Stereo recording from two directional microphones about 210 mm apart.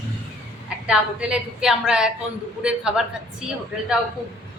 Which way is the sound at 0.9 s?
5° right (ahead or behind).